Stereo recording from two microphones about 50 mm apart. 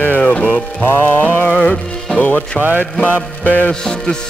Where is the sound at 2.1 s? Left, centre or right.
Left.